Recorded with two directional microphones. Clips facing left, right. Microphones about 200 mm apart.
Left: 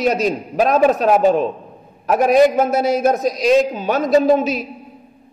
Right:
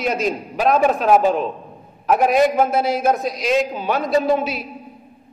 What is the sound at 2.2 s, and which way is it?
A man's voice, 40° left (ahead or behind).